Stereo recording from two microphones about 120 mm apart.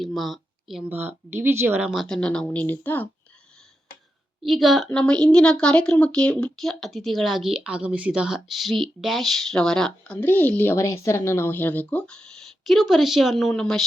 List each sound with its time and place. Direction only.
0.0 s speech: centre (ahead or behind)
0.9 s speech: 15° right (ahead or behind)
1.9 s speech: centre (ahead or behind)
4.4 s a woman's voice: centre (ahead or behind)
10.2 s speech: 15° left (ahead or behind)
10.8 s speech: 25° left (ahead or behind); by 13.8 s 5° left (ahead or behind)